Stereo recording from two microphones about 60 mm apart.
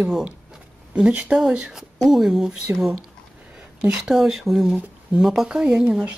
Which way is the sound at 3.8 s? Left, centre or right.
Centre.